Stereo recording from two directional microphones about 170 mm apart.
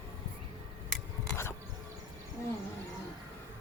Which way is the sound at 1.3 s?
15° left (ahead or behind).